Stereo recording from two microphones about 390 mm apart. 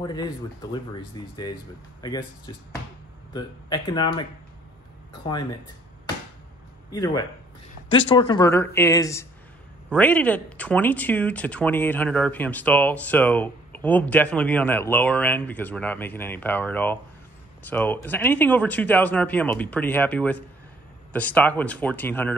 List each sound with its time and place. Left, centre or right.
0.0 s speech: centre
2.0 s speech: centre
6.9 s speech: centre